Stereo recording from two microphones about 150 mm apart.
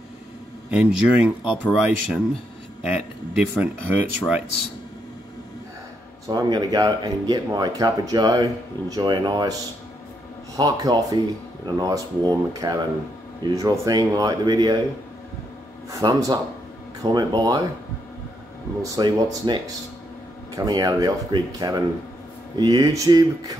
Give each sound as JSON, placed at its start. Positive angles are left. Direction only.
{"t": 0.7, "sound": "speech", "side_deg": -5}
{"t": 6.2, "sound": "speech", "side_deg": -25}
{"t": 15.9, "sound": "speech", "side_deg": -20}
{"t": 18.8, "sound": "speech", "side_deg": -25}